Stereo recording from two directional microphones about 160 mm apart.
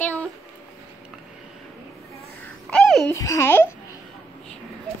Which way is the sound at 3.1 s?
20° left (ahead or behind).